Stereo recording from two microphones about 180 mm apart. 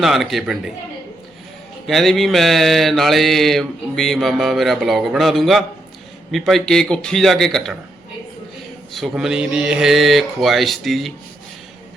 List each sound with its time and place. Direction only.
0.0 s mantra: centre (ahead or behind)
1.9 s mantra: centre (ahead or behind)
8.9 s mantra: centre (ahead or behind)